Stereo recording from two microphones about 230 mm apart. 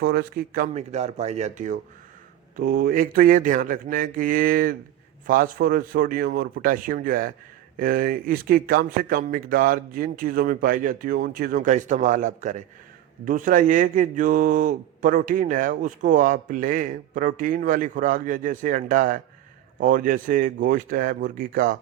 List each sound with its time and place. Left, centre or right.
0.0 s speech: right